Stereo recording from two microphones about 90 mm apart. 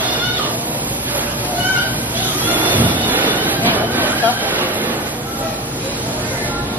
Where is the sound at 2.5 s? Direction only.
20° right (ahead or behind).